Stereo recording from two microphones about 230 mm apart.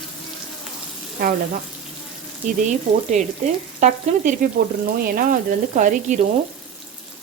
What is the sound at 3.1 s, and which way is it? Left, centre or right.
Speech, right.